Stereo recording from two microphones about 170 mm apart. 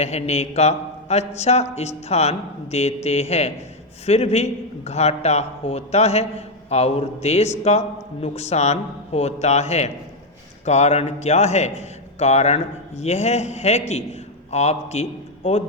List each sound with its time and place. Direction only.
0.0 s a man's voice: 40° left (ahead or behind)